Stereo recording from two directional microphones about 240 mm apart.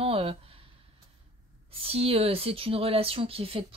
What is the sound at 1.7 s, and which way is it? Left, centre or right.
Speech, right.